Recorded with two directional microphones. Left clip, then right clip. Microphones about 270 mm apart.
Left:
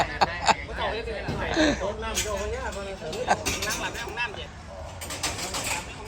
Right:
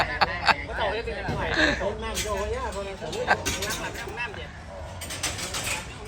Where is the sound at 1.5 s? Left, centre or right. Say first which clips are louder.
Even; centre.